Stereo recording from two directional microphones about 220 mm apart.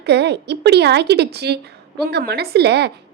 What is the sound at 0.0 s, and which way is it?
A woman's voice, 50° right (ahead or behind).